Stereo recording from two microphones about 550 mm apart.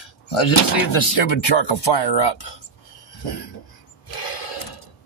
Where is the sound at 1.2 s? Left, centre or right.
Left.